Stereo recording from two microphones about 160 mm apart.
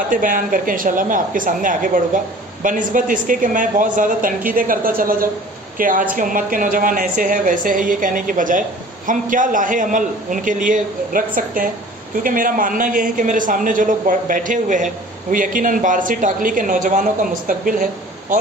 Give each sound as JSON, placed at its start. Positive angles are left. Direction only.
{"t": 0.1, "sound": "a woman's voice", "side_deg": -60}